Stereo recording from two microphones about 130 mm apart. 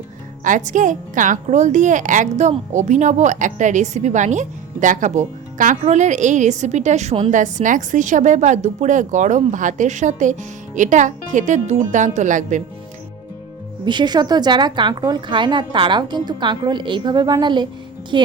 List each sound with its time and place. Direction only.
0.4 s a woman's voice: 80° right
13.8 s a woman's voice: 35° right (ahead or behind)